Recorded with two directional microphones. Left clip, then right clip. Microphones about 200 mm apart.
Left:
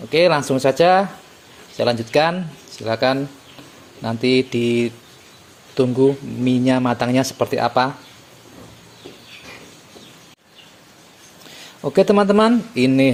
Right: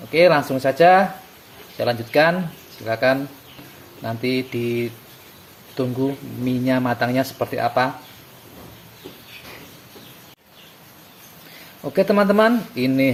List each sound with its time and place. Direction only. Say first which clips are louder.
0.1 s speech: even; 35° left (ahead or behind)
11.8 s speech: left 3 dB; 35° left (ahead or behind)